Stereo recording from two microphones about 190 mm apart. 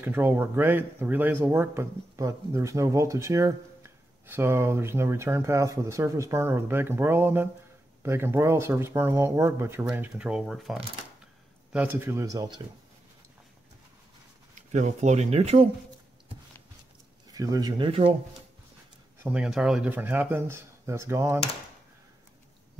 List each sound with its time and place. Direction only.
0.0 s speech: 10° right (ahead or behind)
14.7 s speech: 35° right (ahead or behind)
17.3 s speech: 20° right (ahead or behind)
19.2 s speech: 5° right (ahead or behind)